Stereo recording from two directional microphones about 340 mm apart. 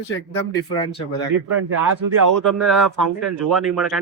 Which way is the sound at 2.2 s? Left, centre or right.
Right.